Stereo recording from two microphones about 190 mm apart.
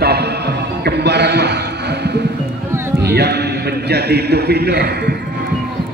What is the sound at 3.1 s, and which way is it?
A man's voice, 60° right (ahead or behind).